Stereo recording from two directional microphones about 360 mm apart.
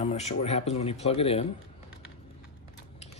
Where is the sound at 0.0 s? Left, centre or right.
Centre.